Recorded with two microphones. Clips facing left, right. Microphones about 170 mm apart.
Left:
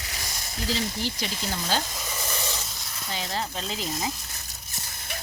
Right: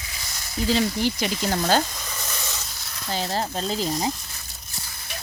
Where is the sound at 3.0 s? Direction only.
35° right (ahead or behind).